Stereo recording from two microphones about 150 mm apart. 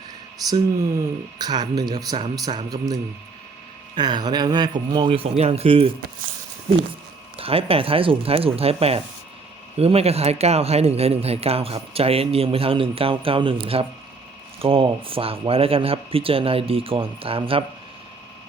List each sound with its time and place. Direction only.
1.4 s speech: 25° right (ahead or behind)
7.3 s speech: 40° right (ahead or behind)